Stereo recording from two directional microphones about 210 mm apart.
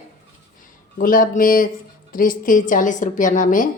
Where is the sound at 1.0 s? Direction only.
40° left (ahead or behind).